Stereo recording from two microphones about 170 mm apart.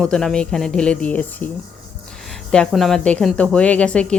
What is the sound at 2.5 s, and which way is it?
Speech, 5° left (ahead or behind).